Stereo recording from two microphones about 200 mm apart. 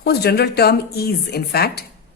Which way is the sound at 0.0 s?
55° left (ahead or behind).